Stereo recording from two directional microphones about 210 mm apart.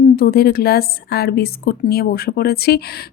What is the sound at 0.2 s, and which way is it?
A woman's voice, 45° left (ahead or behind).